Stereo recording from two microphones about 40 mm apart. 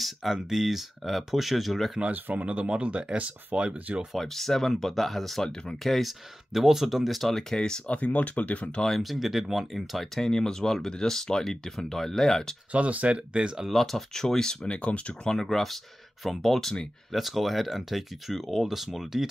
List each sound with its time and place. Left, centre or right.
0.0 s speech: centre
2.0 s speech: right
2.3 s speech: right
4.2 s speech: centre
7.8 s speech: left
8.8 s speech: centre
9.1 s speech: centre
10.2 s speech: centre
12.7 s speech: right
13.7 s speech: centre
14.7 s speech: left
15.2 s speech: centre